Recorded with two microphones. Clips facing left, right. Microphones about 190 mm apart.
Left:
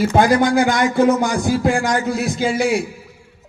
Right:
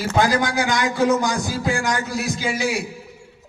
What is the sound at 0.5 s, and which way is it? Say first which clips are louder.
Speech: left 5 dB; 55° left (ahead or behind).